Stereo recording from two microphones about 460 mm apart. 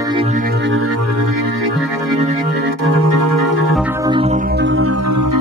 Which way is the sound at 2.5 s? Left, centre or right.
Right.